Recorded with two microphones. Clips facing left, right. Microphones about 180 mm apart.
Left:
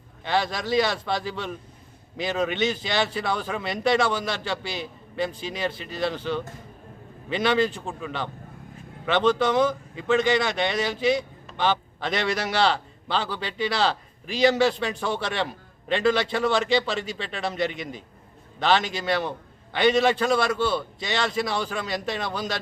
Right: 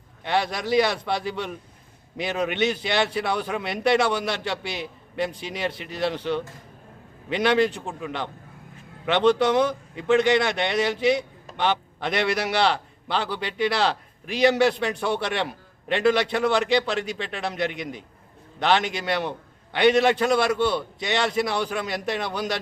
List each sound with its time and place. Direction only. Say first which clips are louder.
0.4 s a man's voice: right 1 dB; 5° right (ahead or behind)
1.2 s a man's voice: right 2 dB; 15° right (ahead or behind)